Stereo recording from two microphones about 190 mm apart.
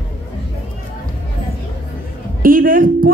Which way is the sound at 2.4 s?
45° right (ahead or behind).